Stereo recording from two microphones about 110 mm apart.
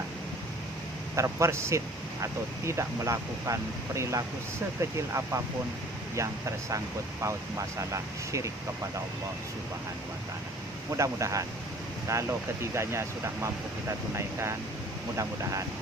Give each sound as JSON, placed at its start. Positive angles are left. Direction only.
{"t": 1.1, "sound": "speech", "side_deg": -25}
{"t": 10.9, "sound": "speech", "side_deg": -30}
{"t": 15.1, "sound": "speech", "side_deg": -30}